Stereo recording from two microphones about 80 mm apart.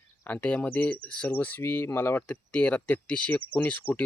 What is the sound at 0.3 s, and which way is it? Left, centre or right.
Speech, centre.